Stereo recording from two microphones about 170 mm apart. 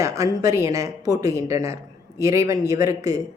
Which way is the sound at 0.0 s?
20° right (ahead or behind).